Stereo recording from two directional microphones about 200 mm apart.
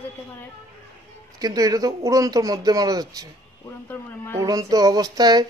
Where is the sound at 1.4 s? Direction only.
20° right (ahead or behind).